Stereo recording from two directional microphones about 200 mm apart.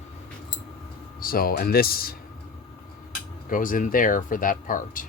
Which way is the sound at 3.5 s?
40° left (ahead or behind).